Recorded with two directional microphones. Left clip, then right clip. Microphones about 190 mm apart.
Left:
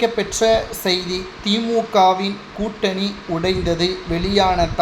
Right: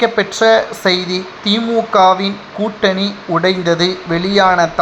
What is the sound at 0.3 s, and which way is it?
Speech, 15° right (ahead or behind).